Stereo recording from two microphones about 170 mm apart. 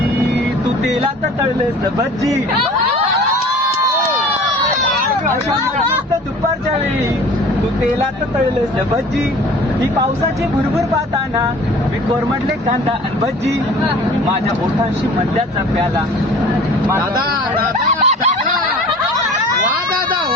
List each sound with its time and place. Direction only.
17.8 s snicker: 40° right (ahead or behind)